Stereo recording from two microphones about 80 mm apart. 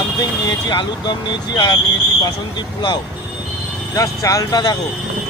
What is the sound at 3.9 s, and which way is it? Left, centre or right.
Speech, left.